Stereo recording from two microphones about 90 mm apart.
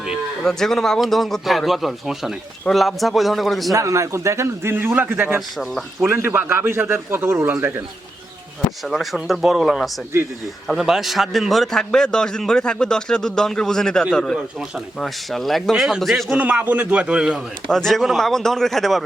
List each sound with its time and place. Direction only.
0.4 s speech: 5° left (ahead or behind)
3.7 s a man's voice: 35° right (ahead or behind)
5.5 s speech: centre (ahead or behind)
6.1 s a man's voice: 25° right (ahead or behind)
8.8 s a man's voice: centre (ahead or behind)
16.4 s a man's voice: 20° right (ahead or behind)
17.7 s speech: 5° left (ahead or behind)